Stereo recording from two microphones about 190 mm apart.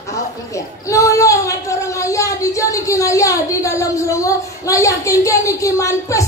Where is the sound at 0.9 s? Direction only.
15° left (ahead or behind).